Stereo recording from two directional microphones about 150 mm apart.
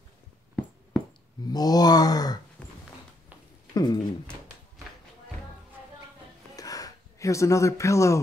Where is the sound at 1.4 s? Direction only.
25° left (ahead or behind).